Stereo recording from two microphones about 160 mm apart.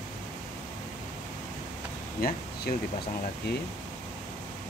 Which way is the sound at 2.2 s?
70° left (ahead or behind).